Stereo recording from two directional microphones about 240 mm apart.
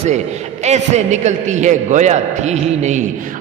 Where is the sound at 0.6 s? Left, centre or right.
Right.